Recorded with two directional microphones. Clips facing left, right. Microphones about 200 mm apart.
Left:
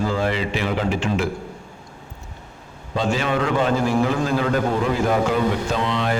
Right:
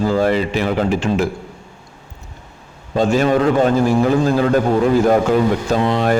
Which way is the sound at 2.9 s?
45° right (ahead or behind).